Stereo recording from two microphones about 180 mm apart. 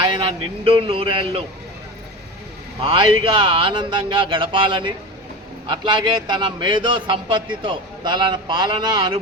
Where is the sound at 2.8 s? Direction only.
25° right (ahead or behind).